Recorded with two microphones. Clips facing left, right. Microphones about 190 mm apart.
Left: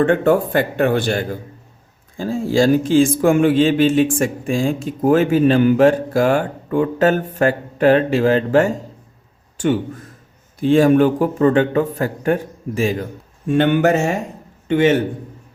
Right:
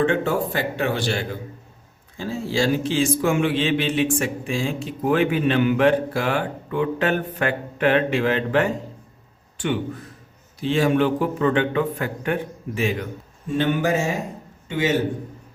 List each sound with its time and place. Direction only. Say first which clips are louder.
0.0 s a man's voice: left 6 dB; 55° left (ahead or behind)
13.5 s speech: left 6 dB; 70° left (ahead or behind)